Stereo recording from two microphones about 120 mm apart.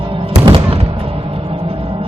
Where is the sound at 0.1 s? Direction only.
50° right (ahead or behind).